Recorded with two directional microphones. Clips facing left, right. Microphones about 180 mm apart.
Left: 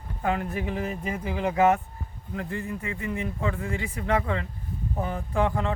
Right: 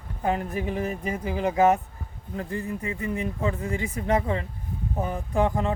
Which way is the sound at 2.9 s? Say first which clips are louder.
Right 2 dB; 35° right (ahead or behind).